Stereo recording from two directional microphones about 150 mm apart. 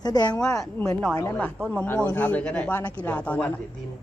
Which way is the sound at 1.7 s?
10° left (ahead or behind).